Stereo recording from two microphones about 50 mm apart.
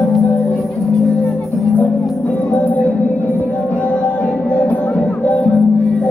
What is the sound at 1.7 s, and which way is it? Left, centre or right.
Music, left.